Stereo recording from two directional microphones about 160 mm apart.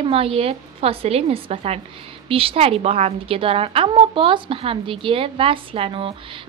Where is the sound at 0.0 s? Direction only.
35° right (ahead or behind).